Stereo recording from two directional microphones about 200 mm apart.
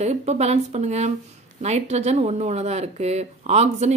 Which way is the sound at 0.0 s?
35° right (ahead or behind).